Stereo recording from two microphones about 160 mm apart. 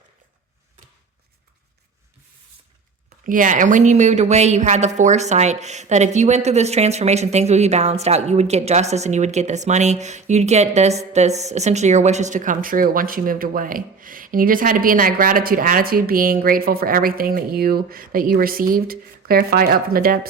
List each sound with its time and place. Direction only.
3.2 s speech: 55° right (ahead or behind)